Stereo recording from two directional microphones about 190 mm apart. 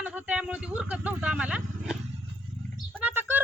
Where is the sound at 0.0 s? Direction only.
5° right (ahead or behind).